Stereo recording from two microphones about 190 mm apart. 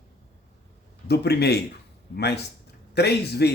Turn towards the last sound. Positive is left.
turn(degrees=60)  # may be behind; listen again after turning